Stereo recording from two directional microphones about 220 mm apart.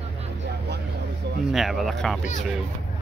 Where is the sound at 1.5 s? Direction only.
Centre (ahead or behind).